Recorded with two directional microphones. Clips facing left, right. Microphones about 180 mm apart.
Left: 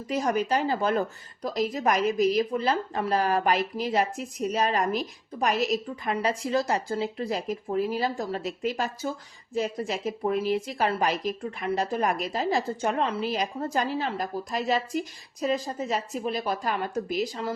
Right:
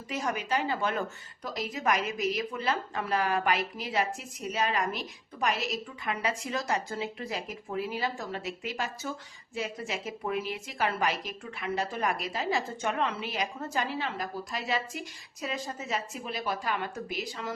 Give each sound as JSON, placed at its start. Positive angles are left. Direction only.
{"t": 0.1, "sound": "a woman's voice", "side_deg": 35}